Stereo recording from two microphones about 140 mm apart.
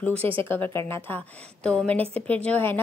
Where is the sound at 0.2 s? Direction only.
40° right (ahead or behind).